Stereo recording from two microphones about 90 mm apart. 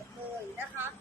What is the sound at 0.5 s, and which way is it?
Speech, 25° right (ahead or behind).